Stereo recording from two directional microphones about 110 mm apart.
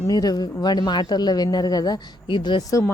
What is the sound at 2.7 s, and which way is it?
Speech, 30° left (ahead or behind).